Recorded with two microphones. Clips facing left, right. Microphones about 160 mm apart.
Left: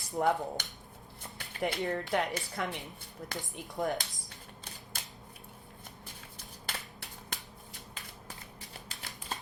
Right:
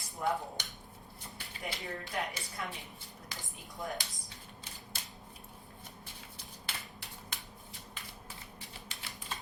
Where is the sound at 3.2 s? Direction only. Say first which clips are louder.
Left 9 dB; 55° left (ahead or behind).